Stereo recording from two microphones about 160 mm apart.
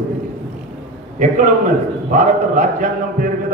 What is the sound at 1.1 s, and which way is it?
A man's voice, 55° right (ahead or behind).